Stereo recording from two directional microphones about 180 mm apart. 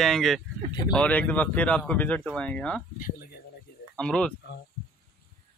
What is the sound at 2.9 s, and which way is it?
Speech, 50° left (ahead or behind).